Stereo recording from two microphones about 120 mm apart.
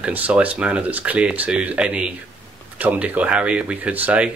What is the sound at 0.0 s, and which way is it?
Speech, 15° right (ahead or behind).